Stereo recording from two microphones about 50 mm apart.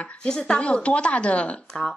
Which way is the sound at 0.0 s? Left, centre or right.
Centre.